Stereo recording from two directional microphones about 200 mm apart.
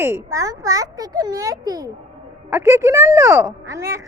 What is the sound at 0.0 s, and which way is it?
Speech, 15° right (ahead or behind).